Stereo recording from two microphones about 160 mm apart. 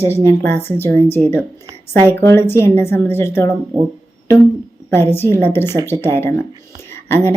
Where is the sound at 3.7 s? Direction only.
15° right (ahead or behind).